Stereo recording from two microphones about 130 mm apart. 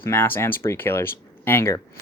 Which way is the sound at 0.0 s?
20° left (ahead or behind).